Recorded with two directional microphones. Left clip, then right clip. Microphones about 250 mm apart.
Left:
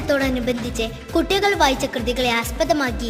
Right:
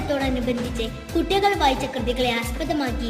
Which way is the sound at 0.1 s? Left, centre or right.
Left.